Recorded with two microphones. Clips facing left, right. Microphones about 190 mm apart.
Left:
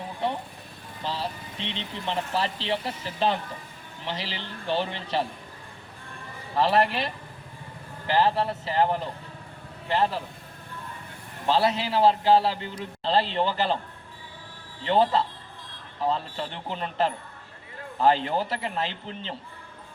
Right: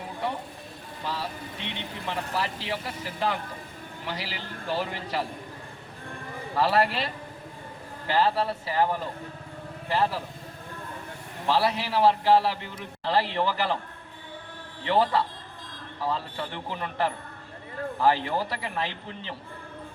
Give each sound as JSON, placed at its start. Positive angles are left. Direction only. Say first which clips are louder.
{"t": 1.0, "sound": "music", "louder": "left 2 dB", "side_deg": 25}
{"t": 2.0, "sound": "a man's voice", "louder": "left 3 dB", "side_deg": 25}
{"t": 6.6, "sound": "a man's voice", "louder": "left 1 dB", "side_deg": 20}
{"t": 8.1, "sound": "a man's voice", "louder": "left 1 dB", "side_deg": 20}
{"t": 11.4, "sound": "a man's voice", "louder": "left 2 dB", "side_deg": 20}
{"t": 14.8, "sound": "a man's voice", "louder": "left 1 dB", "side_deg": 20}